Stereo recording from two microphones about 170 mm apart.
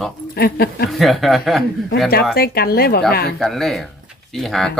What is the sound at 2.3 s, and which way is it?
Speech, 65° left (ahead or behind).